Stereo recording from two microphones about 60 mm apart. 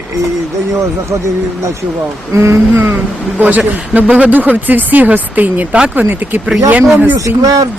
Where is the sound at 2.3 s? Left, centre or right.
Right.